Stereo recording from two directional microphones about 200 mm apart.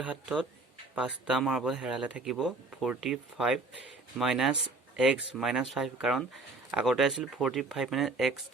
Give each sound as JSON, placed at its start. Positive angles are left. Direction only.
{"t": 0.0, "sound": "speech", "side_deg": -5}